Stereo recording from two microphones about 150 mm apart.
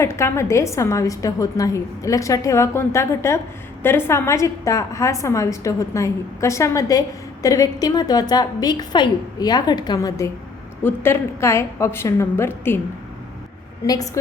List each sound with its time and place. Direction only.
0.0 s a woman's voice: 20° left (ahead or behind)
13.8 s a woman's voice: 25° left (ahead or behind)